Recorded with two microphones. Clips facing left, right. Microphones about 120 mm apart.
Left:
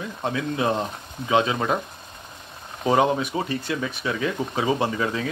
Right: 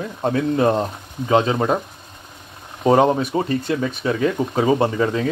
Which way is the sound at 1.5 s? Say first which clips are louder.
Right 5 dB; 25° right (ahead or behind).